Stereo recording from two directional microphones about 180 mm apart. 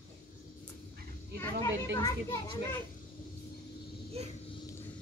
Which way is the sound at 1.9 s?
15° left (ahead or behind).